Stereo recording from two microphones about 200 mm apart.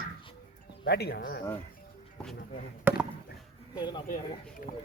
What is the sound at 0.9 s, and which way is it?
Speech, 55° left (ahead or behind).